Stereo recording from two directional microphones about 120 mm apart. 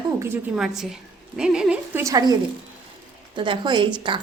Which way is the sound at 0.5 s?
5° right (ahead or behind).